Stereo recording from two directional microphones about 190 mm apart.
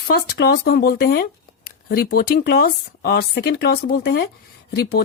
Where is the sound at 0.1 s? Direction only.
55° left (ahead or behind).